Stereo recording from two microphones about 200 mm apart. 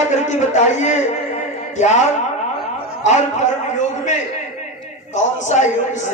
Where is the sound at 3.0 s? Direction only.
35° left (ahead or behind).